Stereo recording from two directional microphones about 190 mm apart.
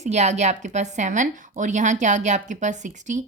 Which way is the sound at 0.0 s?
35° right (ahead or behind).